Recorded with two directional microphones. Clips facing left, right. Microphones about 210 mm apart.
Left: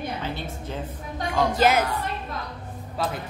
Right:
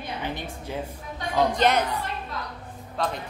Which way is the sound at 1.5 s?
5° left (ahead or behind).